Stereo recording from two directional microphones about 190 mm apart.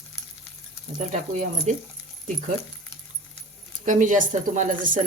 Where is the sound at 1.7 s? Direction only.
40° right (ahead or behind).